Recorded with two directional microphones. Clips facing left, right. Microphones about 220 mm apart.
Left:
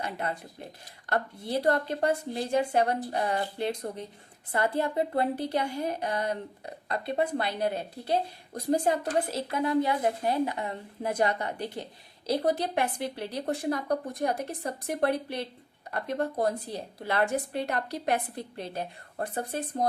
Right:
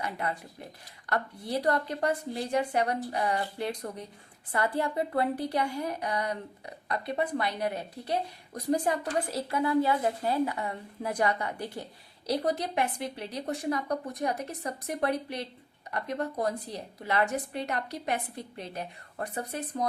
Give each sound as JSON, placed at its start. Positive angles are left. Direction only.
{"t": 0.0, "sound": "a woman's voice", "side_deg": 25}
{"t": 17.7, "sound": "a woman's voice", "side_deg": 55}
{"t": 18.1, "sound": "a woman's voice", "side_deg": 35}